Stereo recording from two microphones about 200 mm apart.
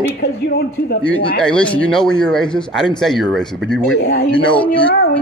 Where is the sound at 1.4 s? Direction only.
5° left (ahead or behind).